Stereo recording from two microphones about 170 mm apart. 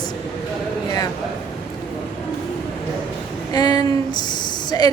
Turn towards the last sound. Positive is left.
turn(degrees=25)  # may be behind; listen again after turning